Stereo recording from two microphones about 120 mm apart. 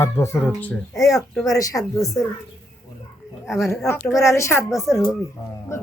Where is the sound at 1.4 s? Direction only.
25° left (ahead or behind).